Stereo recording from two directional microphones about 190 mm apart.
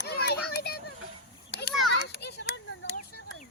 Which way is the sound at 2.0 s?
60° left (ahead or behind).